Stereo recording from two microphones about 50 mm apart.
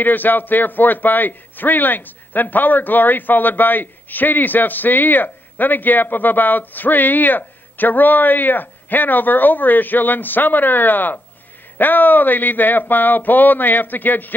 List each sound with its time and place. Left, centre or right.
0.0 s a man's voice: left